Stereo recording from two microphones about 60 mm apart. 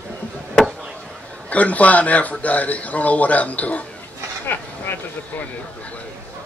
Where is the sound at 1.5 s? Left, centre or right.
Left.